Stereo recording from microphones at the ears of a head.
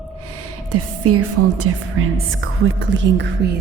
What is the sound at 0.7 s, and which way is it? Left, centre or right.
Speech, right.